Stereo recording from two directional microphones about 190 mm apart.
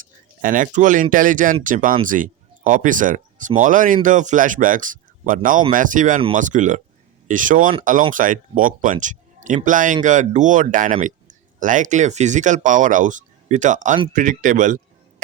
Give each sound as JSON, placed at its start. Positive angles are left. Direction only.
{"t": 0.4, "sound": "speech", "side_deg": -45}